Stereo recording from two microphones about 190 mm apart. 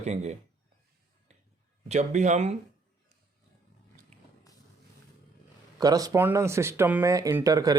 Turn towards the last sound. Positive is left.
turn(degrees=-20)  # may be behind; listen again after turning